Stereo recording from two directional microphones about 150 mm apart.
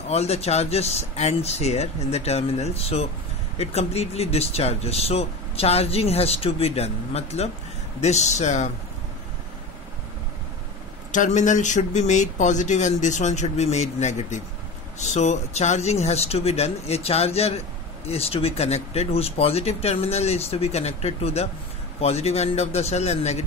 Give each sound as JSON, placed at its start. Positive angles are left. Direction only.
{"t": 0.1, "sound": "speech", "side_deg": 45}
{"t": 11.1, "sound": "speech", "side_deg": 55}